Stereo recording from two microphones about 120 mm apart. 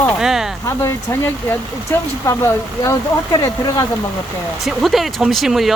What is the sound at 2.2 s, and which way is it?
Speech, 25° left (ahead or behind).